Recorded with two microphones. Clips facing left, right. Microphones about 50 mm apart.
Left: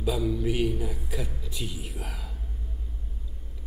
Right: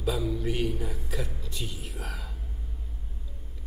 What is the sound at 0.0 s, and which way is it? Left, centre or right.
Speech, centre.